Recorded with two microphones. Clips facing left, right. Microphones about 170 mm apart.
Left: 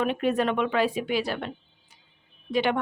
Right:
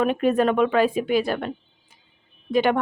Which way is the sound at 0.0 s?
45° right (ahead or behind).